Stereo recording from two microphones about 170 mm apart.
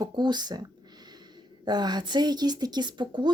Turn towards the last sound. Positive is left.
turn(degrees=-25)  # may be behind; listen again after turning